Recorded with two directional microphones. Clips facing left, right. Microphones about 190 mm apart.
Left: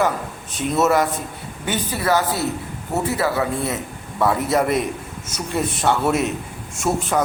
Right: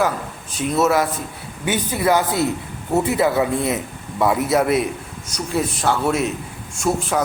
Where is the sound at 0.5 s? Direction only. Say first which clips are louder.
Even; centre (ahead or behind).